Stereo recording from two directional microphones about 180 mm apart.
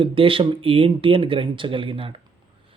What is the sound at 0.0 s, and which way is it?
Speech, 30° right (ahead or behind).